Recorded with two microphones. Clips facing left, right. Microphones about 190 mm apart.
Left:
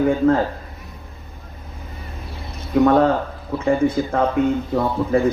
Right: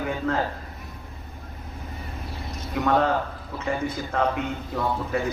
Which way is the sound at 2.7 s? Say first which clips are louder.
Left 8 dB; 45° left (ahead or behind).